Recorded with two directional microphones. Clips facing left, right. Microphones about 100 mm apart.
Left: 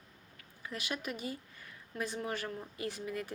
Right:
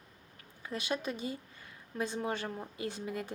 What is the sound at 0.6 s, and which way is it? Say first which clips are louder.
A woman's voice: right 4 dB; 30° right (ahead or behind).